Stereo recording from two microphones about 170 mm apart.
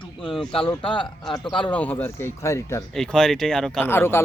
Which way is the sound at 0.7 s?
30° left (ahead or behind).